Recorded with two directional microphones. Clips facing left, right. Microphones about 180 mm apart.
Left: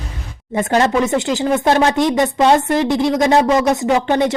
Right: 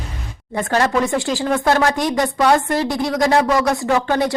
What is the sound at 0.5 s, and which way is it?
Speech, 20° left (ahead or behind).